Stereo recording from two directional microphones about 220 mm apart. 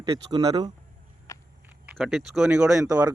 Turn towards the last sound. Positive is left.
turn(degrees=-5)  # may be behind; listen again after turning